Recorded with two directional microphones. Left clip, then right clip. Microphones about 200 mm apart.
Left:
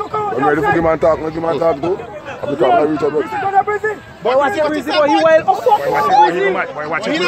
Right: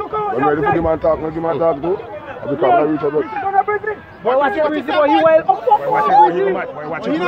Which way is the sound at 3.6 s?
50° left (ahead or behind).